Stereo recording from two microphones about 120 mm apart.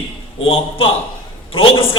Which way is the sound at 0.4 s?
50° left (ahead or behind).